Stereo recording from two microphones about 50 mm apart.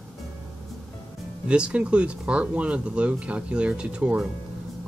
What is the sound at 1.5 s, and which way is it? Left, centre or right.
Speech, right.